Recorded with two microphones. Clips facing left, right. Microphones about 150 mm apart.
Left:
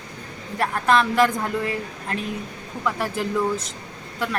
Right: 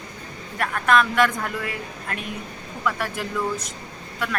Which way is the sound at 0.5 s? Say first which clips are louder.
Left 1 dB; 25° left (ahead or behind).